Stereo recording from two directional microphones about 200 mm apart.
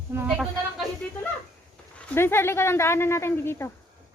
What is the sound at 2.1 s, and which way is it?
Speech, 10° left (ahead or behind).